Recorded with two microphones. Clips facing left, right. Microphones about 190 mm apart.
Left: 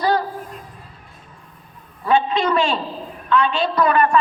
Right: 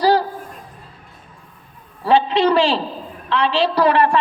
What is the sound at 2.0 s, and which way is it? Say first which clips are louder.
A man's voice: right 3 dB; 30° right (ahead or behind).